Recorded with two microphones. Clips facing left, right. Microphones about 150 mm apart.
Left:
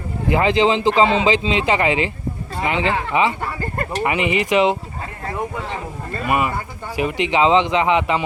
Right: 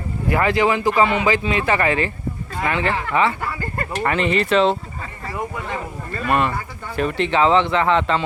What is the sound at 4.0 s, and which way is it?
Speech, 15° left (ahead or behind).